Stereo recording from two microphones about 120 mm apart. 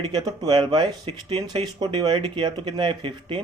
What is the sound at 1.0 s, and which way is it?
Speech, 50° right (ahead or behind).